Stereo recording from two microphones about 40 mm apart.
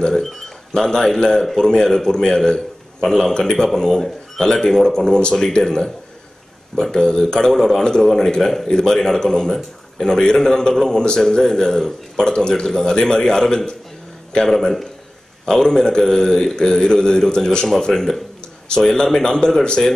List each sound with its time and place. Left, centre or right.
0.1 s a man's voice: centre
15.4 s a man's voice: centre